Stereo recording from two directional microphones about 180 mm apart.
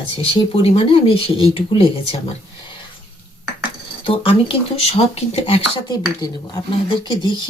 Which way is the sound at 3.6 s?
30° left (ahead or behind).